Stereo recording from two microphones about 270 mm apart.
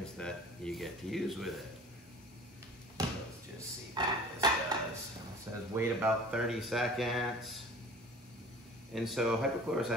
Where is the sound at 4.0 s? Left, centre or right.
Centre.